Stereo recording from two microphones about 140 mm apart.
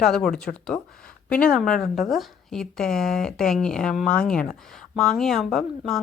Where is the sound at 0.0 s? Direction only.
5° left (ahead or behind).